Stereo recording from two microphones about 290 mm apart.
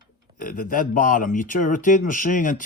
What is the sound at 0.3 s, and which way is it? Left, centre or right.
Speech, left.